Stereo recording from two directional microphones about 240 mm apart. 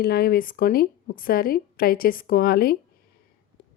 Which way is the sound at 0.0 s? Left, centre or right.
Left.